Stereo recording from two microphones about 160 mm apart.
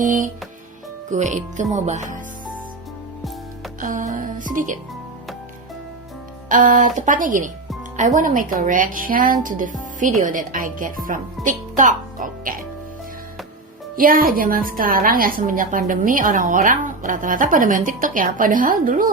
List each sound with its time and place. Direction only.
0.0 s speech: 55° right (ahead or behind)
3.8 s a woman's voice: 55° right (ahead or behind)
6.5 s a woman's voice: 55° right (ahead or behind)
13.9 s a woman's voice: 60° right (ahead or behind)